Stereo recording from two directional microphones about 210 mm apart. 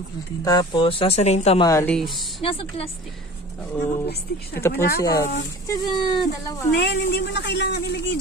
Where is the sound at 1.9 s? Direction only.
Centre (ahead or behind).